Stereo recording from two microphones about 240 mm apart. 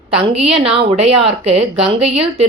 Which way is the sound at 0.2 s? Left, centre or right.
Right.